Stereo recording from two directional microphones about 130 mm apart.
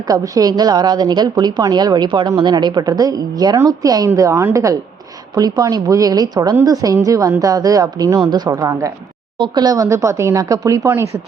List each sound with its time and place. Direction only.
0.1 s a woman's voice: 30° right (ahead or behind)